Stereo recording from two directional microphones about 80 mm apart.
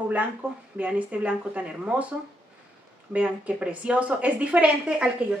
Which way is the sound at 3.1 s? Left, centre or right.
Centre.